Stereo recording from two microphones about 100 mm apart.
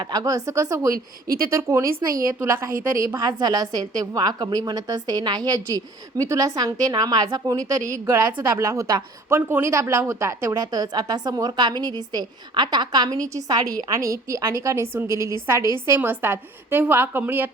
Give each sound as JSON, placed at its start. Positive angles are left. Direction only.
{"t": 0.0, "sound": "a woman's voice", "side_deg": -40}
{"t": 3.2, "sound": "a woman's voice", "side_deg": -45}
{"t": 8.0, "sound": "a woman's voice", "side_deg": -20}